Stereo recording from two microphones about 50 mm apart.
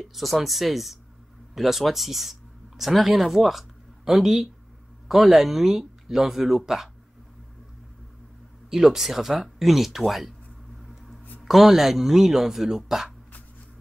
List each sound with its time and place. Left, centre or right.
0.0 s speech: centre
8.6 s speech: centre
11.4 s speech: centre